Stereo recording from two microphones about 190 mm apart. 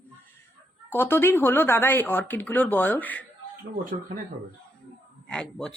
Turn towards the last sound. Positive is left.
turn(degrees=5)  # may be behind; listen again after turning